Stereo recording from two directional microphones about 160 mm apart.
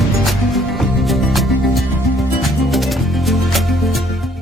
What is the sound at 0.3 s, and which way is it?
Music, centre (ahead or behind).